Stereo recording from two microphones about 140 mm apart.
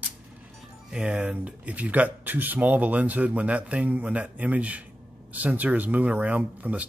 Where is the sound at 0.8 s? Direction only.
5° right (ahead or behind).